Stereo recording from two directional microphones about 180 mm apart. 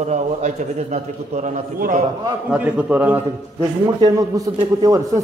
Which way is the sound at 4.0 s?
20° right (ahead or behind).